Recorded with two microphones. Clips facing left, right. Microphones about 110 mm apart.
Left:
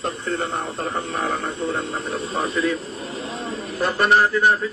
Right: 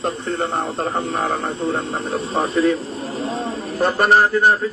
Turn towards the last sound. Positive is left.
turn(degrees=-40)  # may be behind; listen again after turning